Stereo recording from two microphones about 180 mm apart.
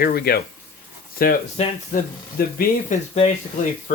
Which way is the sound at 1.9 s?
55° left (ahead or behind).